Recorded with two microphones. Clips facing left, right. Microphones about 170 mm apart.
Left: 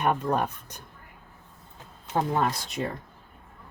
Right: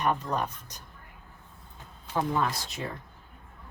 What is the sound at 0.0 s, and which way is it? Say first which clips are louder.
Speech: left 3 dB; 55° left (ahead or behind).